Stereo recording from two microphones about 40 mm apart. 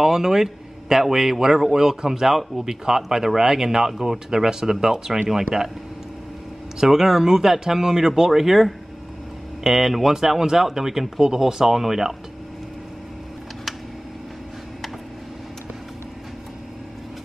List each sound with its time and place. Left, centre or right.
0.0 s a man's voice: centre
6.8 s a man's voice: centre